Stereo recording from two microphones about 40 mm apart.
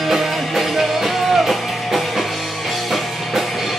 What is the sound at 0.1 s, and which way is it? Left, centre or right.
Music, centre.